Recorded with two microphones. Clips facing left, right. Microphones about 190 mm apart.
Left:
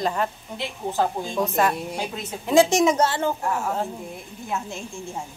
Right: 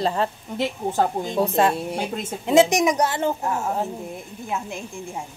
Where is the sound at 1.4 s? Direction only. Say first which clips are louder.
Right 2 dB; 30° right (ahead or behind).